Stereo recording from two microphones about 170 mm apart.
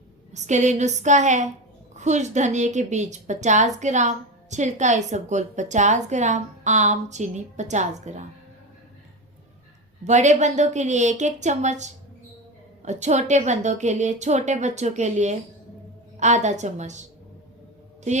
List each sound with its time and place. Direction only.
0.3 s a woman's voice: 45° right (ahead or behind)
10.0 s a woman's voice: 45° right (ahead or behind)